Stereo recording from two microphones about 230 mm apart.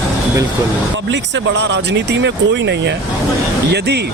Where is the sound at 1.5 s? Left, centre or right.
Right.